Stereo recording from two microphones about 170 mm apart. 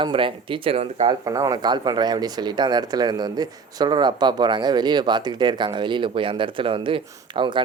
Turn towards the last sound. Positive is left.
turn(degrees=-30)  # may be behind; listen again after turning